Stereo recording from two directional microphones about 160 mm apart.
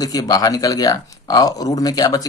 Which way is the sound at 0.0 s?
25° left (ahead or behind).